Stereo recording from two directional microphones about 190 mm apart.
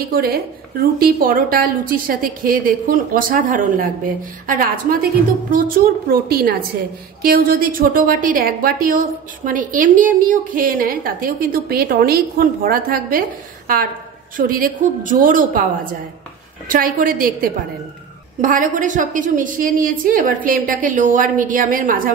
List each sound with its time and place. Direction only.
0.0 s a woman's voice: 55° right (ahead or behind)
14.3 s a woman's voice: 45° right (ahead or behind)